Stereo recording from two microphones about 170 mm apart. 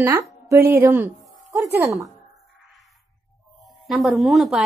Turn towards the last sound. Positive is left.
turn(degrees=0)  # may be behind; listen again after turning